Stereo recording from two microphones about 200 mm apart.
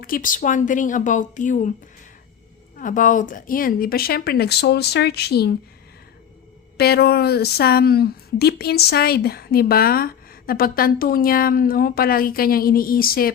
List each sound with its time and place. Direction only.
0.0 s speech: 45° left (ahead or behind)
2.7 s speech: 40° left (ahead or behind)
6.7 s speech: 50° left (ahead or behind)